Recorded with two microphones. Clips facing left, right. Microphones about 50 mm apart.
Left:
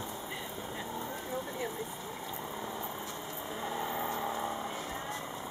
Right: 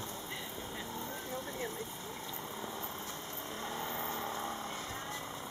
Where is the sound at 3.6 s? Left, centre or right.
Centre.